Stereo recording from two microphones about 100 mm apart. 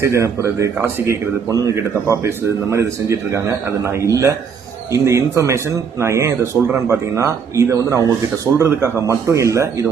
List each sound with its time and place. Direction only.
0.0 s a man's voice: 30° right (ahead or behind)